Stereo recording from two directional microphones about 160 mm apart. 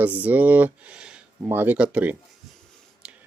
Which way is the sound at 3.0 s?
5° right (ahead or behind).